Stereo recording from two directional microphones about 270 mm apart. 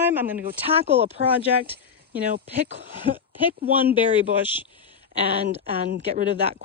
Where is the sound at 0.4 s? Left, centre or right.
Right.